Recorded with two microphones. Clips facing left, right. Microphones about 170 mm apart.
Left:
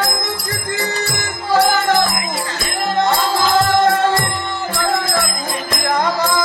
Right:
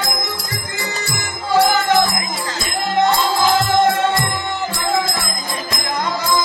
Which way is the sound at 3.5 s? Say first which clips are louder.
Left 5 dB; 60° left (ahead or behind).